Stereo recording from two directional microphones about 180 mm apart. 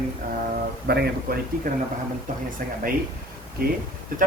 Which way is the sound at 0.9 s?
60° right (ahead or behind).